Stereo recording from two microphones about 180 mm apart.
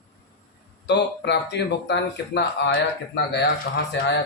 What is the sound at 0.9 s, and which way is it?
Speech, 70° left (ahead or behind).